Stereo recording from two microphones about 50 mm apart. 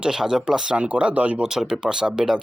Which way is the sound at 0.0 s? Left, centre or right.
Centre.